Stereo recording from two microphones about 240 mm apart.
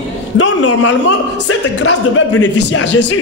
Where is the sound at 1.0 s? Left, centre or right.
Left.